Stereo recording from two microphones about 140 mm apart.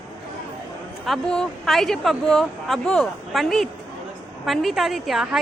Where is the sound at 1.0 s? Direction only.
Centre (ahead or behind).